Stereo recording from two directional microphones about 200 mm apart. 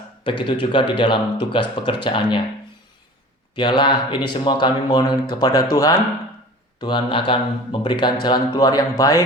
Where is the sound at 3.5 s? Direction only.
25° left (ahead or behind).